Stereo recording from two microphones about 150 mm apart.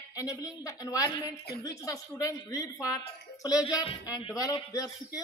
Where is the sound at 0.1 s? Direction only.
25° left (ahead or behind).